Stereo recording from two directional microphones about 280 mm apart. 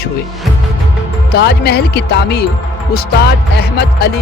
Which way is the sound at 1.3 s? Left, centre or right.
Left.